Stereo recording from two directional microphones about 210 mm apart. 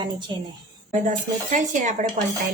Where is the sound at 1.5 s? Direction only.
35° right (ahead or behind).